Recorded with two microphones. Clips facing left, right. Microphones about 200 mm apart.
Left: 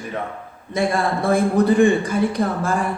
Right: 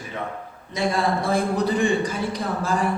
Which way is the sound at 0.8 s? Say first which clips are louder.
Left 2 dB; 55° left (ahead or behind).